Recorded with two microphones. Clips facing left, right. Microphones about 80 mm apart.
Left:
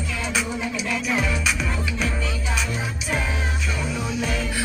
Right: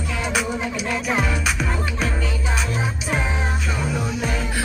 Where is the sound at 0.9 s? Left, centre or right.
Right.